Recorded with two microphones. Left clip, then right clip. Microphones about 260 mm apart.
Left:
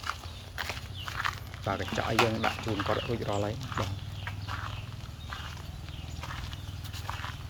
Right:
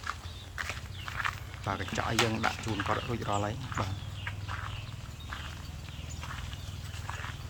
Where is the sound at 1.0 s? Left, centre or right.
Left.